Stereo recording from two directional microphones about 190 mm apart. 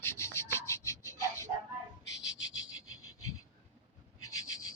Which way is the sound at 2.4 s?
90° left.